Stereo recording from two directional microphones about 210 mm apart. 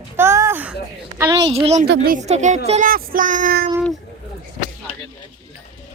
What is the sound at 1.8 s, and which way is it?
Speech, 50° right (ahead or behind).